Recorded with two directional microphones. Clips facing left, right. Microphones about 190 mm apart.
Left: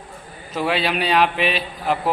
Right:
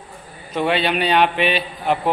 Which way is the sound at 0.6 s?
Centre (ahead or behind).